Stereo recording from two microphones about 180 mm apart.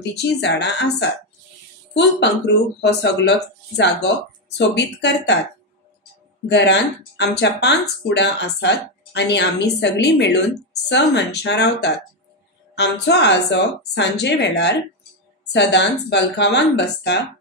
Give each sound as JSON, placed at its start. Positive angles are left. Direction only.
{"t": 0.0, "sound": "speech", "side_deg": 65}
{"t": 6.5, "sound": "speech", "side_deg": 70}